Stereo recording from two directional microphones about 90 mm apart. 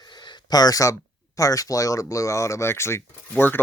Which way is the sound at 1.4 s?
40° left (ahead or behind).